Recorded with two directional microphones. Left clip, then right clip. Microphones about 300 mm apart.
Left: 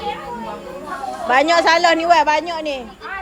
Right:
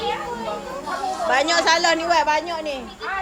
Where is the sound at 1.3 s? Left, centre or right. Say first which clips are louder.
Left 5 dB; left.